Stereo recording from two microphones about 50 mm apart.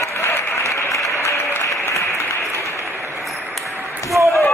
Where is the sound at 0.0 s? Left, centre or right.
Left.